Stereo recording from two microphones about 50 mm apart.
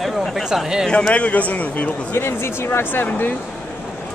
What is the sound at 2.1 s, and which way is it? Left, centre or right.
Speech, left.